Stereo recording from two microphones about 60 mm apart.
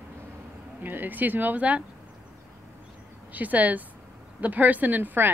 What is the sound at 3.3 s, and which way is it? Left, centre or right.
A woman's voice, right.